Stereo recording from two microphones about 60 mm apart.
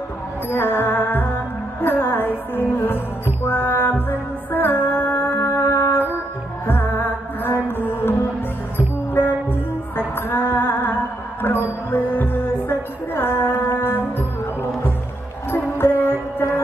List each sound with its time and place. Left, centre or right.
0.5 s music: left